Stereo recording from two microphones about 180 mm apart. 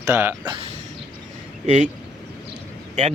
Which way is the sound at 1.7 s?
45° right (ahead or behind).